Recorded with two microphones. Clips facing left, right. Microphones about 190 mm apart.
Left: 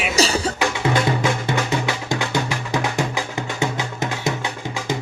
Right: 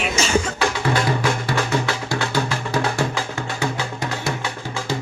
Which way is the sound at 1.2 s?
20° left (ahead or behind).